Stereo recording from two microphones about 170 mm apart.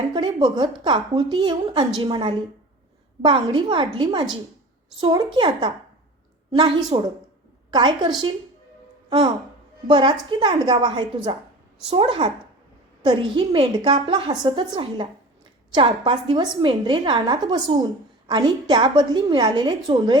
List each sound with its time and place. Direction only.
0.1 s a woman's voice: 25° right (ahead or behind)